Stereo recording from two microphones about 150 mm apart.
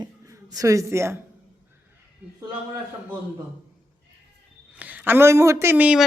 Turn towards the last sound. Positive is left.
turn(degrees=-5)  # may be behind; listen again after turning